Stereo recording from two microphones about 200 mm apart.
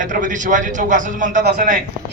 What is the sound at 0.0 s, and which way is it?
A man's voice, 40° right (ahead or behind).